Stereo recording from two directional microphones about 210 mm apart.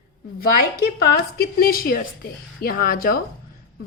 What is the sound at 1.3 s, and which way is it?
A woman's voice, 45° left (ahead or behind).